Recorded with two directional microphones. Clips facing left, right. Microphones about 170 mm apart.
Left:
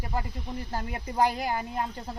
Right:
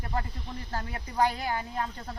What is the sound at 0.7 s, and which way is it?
A woman's voice, 10° left (ahead or behind).